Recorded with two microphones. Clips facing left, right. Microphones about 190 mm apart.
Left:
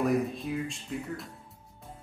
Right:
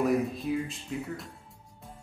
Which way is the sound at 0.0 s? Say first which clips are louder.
Right 1 dB; centre (ahead or behind).